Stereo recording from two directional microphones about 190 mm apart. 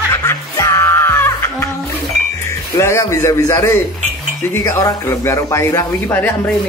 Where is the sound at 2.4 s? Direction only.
15° left (ahead or behind).